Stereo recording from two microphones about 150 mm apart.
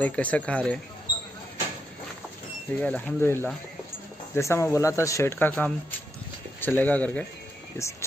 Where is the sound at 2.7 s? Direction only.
10° left (ahead or behind).